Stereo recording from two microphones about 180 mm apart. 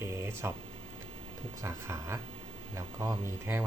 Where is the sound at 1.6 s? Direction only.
15° right (ahead or behind).